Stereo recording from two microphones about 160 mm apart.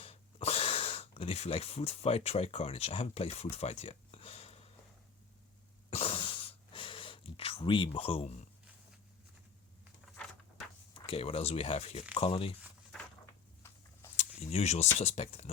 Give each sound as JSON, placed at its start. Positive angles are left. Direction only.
{"t": 0.0, "sound": "speech", "side_deg": 40}
{"t": 3.5, "sound": "a sound", "side_deg": 40}
{"t": 5.9, "sound": "gasp", "side_deg": 40}
{"t": 10.9, "sound": "speech", "side_deg": 35}
{"t": 13.2, "sound": "a sound", "side_deg": 15}
{"t": 14.2, "sound": "speech", "side_deg": 40}